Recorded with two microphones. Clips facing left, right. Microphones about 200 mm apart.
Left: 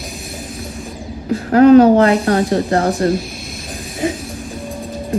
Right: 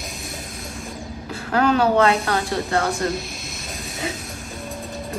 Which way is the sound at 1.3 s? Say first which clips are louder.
Left 12 dB; 35° left (ahead or behind).